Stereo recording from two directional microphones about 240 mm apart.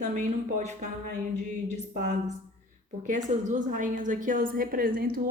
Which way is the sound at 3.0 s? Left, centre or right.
Right.